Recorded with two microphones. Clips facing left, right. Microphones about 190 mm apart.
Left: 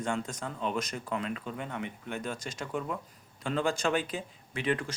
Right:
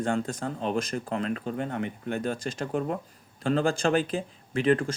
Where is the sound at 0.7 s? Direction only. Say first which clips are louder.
Right 5 dB; 50° right (ahead or behind); by 2.5 s 35° right (ahead or behind).